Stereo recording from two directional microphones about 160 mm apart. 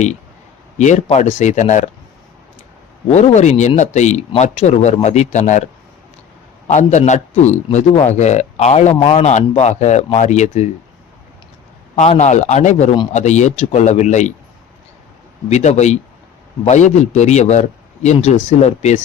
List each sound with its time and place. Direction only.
0.8 s a man's voice: 45° left (ahead or behind)
3.1 s a man's voice: 45° left (ahead or behind)
6.7 s a man's voice: 50° left (ahead or behind)
11.9 s a man's voice: 50° left (ahead or behind)
15.4 s a man's voice: 45° left (ahead or behind)